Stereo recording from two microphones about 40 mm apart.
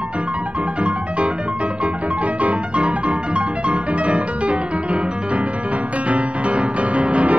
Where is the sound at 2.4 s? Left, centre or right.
Right.